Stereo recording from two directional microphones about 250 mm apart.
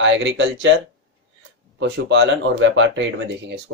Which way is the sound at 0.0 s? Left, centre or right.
Right.